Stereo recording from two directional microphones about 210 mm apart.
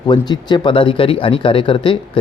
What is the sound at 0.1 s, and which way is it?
Speech, 20° left (ahead or behind).